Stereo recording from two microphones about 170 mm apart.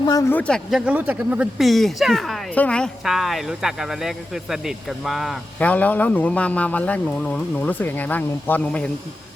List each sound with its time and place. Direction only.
0.0 s speech: 20° left (ahead or behind)
0.3 s speech: 5° left (ahead or behind)
0.9 s speech: 10° right (ahead or behind)
5.6 s speech: 10° left (ahead or behind)